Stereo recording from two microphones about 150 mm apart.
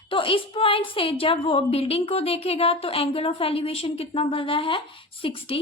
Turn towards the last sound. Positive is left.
turn(degrees=35)  # may be behind; listen again after turning